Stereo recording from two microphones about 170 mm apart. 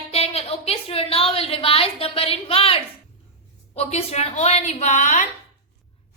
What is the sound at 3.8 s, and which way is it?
Speech, 40° left (ahead or behind).